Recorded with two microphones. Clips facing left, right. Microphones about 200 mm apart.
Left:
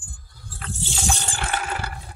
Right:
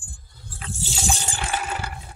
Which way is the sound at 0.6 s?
5° right (ahead or behind).